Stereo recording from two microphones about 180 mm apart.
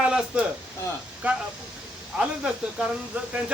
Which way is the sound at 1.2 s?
10° right (ahead or behind).